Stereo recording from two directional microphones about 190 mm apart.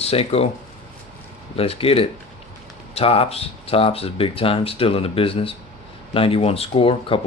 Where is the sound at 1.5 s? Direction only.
30° left (ahead or behind).